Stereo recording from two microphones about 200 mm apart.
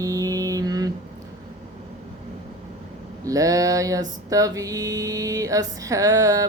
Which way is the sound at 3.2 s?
15° right (ahead or behind).